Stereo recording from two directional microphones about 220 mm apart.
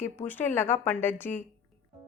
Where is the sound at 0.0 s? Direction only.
10° left (ahead or behind).